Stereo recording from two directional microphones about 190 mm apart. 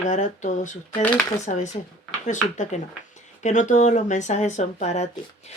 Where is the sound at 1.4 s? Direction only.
40° left (ahead or behind).